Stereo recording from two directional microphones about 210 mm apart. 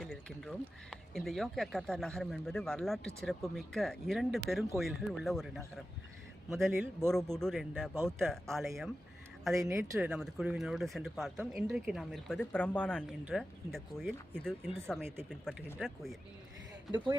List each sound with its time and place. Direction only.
0.0 s speech: 5° left (ahead or behind)
7.1 s speech: centre (ahead or behind)
9.6 s speech: 15° right (ahead or behind); by 15.0 s 5° left (ahead or behind)
15.0 s speech: 10° right (ahead or behind)
15.3 s speech: centre (ahead or behind)
16.9 s speech: 20° right (ahead or behind)